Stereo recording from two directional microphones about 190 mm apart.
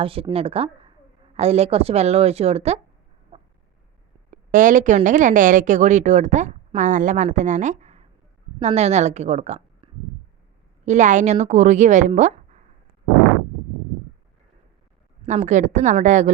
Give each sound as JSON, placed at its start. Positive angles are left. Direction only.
{"t": 0.0, "sound": "a woman's voice", "side_deg": -30}
{"t": 4.3, "sound": "a woman's voice", "side_deg": -45}
{"t": 15.3, "sound": "speech", "side_deg": -40}